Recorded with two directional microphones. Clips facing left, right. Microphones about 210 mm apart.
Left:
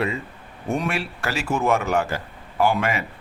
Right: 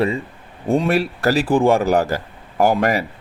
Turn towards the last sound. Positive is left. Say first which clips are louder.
# right 5 dB
turn(degrees=-35)  # may be behind; listen again after turning